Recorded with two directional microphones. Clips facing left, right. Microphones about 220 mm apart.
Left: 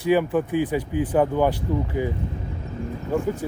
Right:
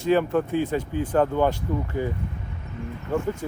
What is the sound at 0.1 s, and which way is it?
Speech, 15° left (ahead or behind).